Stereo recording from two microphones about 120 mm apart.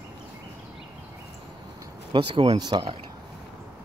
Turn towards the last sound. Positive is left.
turn(degrees=-40)  # may be behind; listen again after turning